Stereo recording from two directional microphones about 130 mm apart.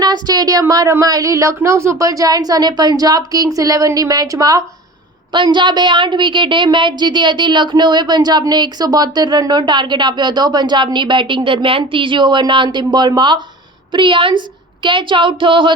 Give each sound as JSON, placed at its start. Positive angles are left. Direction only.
{"t": 0.0, "sound": "speech", "side_deg": -30}
{"t": 5.3, "sound": "a woman's voice", "side_deg": -35}